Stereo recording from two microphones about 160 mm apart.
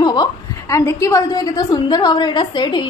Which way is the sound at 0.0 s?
25° left (ahead or behind).